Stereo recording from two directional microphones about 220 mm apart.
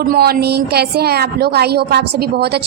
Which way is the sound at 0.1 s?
45° right (ahead or behind).